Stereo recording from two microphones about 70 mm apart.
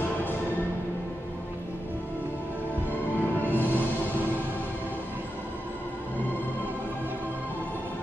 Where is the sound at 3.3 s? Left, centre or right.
Left.